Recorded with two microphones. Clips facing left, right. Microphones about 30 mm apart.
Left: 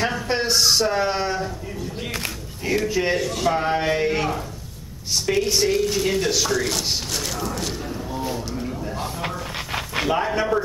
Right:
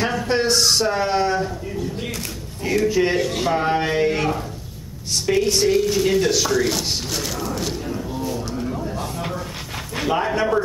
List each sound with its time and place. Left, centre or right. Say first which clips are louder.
0.0 s speech: right 3 dB; centre
2.6 s speech: right 3 dB; centre
3.2 s a man's voice: right 3 dB; centre
3.4 s speech: left 2 dB; centre
10.0 s speech: right 3 dB; centre